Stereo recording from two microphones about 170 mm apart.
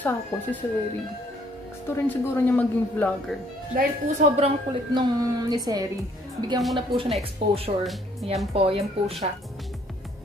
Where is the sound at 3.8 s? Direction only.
45° right (ahead or behind).